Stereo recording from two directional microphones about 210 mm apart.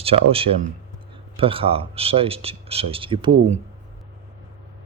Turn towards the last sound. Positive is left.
turn(degrees=-25)  # may be behind; listen again after turning